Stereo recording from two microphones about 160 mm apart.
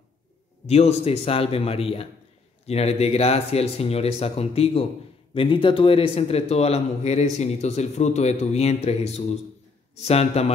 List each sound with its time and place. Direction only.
0.7 s a man's voice: 40° left (ahead or behind)